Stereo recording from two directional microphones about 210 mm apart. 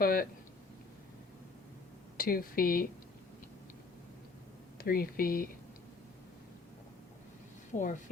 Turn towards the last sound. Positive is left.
turn(degrees=35)  # may be behind; listen again after turning